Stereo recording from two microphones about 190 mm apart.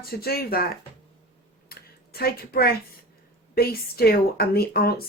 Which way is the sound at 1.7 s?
55° left (ahead or behind).